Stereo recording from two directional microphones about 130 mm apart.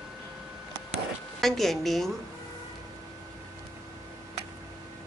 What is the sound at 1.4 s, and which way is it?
Speech, centre (ahead or behind).